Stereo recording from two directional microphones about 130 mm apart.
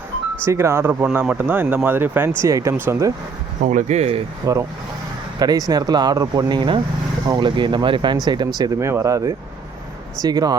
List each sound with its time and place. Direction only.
0.4 s speech: 20° right (ahead or behind)
3.7 s speech: 65° right (ahead or behind)
4.5 s speech: 25° right (ahead or behind)